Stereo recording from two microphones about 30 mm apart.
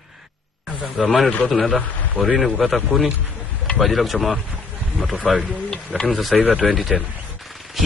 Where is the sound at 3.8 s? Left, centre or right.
Centre.